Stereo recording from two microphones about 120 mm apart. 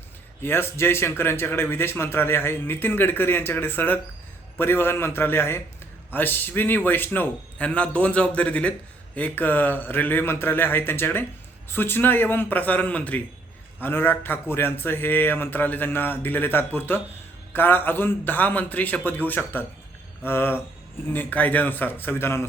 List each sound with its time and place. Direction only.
0.4 s a man's voice: 20° left (ahead or behind)